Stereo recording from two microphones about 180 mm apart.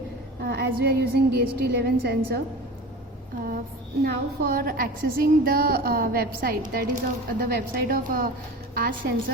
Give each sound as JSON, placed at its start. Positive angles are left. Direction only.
{"t": 0.4, "sound": "a sound", "side_deg": -65}
{"t": 0.8, "sound": "a woman's voice", "side_deg": -60}
{"t": 4.0, "sound": "a woman's voice", "side_deg": -55}